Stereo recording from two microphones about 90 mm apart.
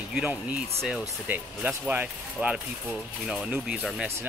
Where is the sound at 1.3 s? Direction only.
15° right (ahead or behind).